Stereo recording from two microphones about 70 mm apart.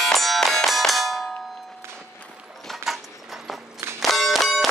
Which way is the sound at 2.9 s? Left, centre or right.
Centre.